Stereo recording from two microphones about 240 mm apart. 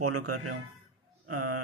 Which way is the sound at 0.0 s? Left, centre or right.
Right.